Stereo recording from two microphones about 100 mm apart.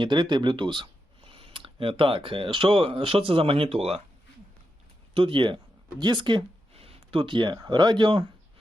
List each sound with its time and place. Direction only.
0.0 s speech: 50° right (ahead or behind); by 4.0 s 80° right
5.1 s speech: 60° right (ahead or behind)
6.7 s speech: 70° right (ahead or behind); by 8.3 s 55° right (ahead or behind)